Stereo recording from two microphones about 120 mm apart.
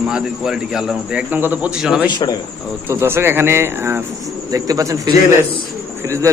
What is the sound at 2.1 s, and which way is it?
Speech, 35° left (ahead or behind).